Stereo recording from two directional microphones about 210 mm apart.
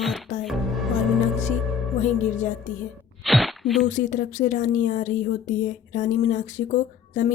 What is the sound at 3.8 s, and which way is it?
A woman's voice, 35° left (ahead or behind).